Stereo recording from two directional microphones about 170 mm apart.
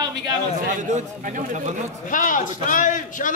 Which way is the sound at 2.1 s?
50° left (ahead or behind).